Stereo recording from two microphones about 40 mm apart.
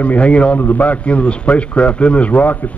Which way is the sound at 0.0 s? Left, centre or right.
Left.